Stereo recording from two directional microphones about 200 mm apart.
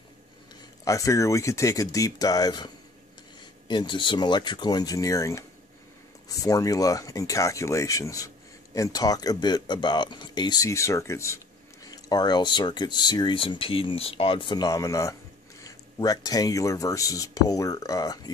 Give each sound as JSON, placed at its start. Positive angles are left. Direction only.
{"t": 0.8, "sound": "speech", "side_deg": 15}